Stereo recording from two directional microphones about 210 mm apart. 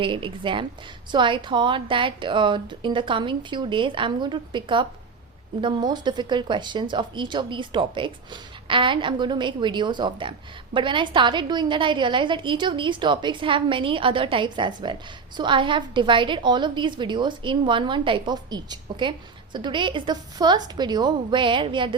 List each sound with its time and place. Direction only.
0.0 s speech: 25° right (ahead or behind)